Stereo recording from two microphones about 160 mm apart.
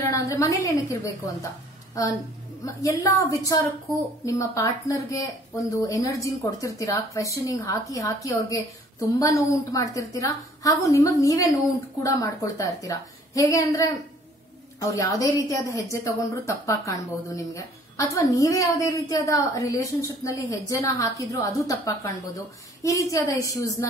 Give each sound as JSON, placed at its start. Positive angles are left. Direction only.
{"t": 0.1, "sound": "a woman's voice", "side_deg": 20}
{"t": 2.6, "sound": "a woman's voice", "side_deg": 20}